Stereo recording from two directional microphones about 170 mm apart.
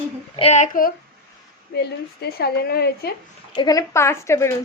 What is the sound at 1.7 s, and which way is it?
A woman's voice, 75° left (ahead or behind).